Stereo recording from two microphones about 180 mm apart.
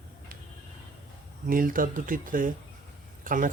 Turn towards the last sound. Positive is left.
turn(degrees=-45)  # may be behind; listen again after turning